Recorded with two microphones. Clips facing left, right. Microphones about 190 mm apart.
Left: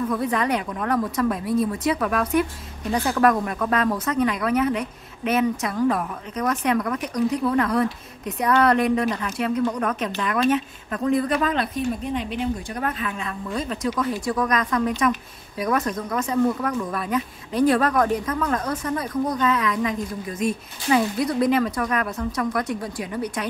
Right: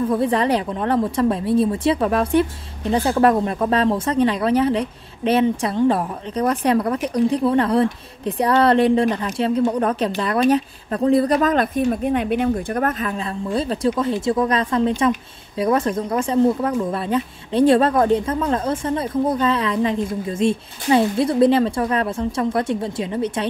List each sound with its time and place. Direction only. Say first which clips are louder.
0.1 s speech: right 5 dB; 30° right (ahead or behind); by 13.1 s 50° right (ahead or behind)
13.2 s speech: right 5 dB; 30° right (ahead or behind)